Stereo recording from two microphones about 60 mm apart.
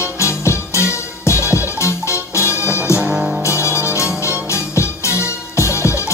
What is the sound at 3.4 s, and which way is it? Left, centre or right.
Music, left.